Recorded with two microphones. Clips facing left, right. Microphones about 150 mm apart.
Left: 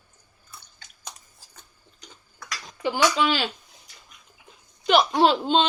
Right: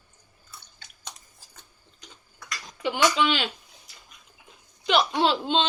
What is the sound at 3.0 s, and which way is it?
Speech, centre (ahead or behind).